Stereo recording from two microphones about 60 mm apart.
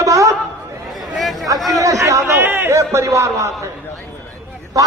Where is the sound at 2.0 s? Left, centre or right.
Right.